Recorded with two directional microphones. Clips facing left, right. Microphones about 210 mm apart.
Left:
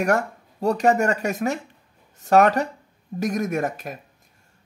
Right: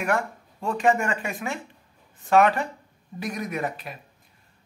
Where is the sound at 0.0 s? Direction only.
40° left (ahead or behind).